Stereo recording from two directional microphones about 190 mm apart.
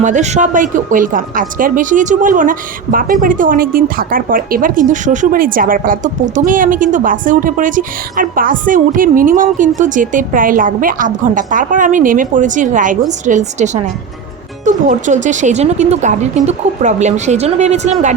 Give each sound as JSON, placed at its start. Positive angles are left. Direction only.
{"t": 0.0, "sound": "a woman's voice", "side_deg": -40}